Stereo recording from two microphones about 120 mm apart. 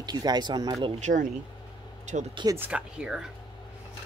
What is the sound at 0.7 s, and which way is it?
Speech, 65° right (ahead or behind).